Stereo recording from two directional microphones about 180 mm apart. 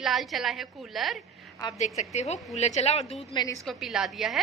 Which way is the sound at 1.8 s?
40° left (ahead or behind).